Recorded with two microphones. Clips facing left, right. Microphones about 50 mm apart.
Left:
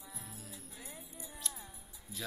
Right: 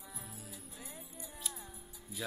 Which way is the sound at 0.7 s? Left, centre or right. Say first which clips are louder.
Even; left.